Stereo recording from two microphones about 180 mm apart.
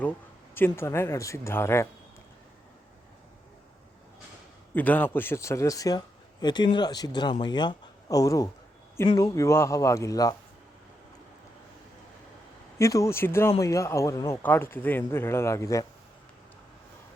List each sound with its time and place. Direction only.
0.5 s a man's voice: 15° left (ahead or behind)
4.7 s a man's voice: 10° left (ahead or behind)
12.8 s a man's voice: 15° left (ahead or behind)